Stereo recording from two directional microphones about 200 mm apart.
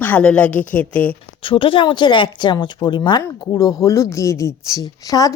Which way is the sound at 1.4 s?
25° left (ahead or behind).